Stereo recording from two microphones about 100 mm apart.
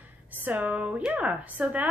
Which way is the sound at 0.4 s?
15° right (ahead or behind).